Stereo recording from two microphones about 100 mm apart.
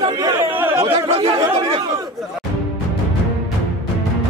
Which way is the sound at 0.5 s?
20° right (ahead or behind).